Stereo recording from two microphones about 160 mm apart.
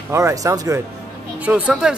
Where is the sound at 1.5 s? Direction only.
10° right (ahead or behind).